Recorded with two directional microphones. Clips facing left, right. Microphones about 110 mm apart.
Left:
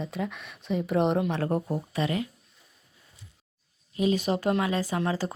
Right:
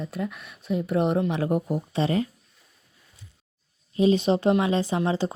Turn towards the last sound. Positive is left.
turn(degrees=-20)  # may be behind; listen again after turning